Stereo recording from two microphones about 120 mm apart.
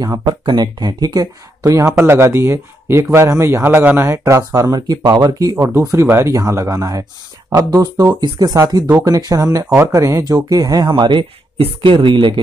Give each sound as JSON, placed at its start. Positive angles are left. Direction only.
{"t": 0.0, "sound": "speech", "side_deg": -35}
{"t": 5.6, "sound": "speech", "side_deg": -25}